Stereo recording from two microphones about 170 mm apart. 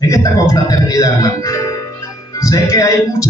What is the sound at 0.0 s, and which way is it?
A man's voice, 20° left (ahead or behind).